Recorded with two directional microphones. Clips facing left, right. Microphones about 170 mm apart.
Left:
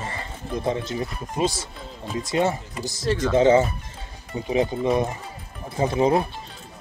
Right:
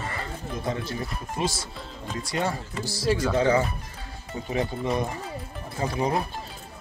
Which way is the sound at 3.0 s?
10° right (ahead or behind).